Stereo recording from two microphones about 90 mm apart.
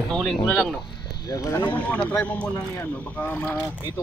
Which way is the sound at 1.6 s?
15° left (ahead or behind).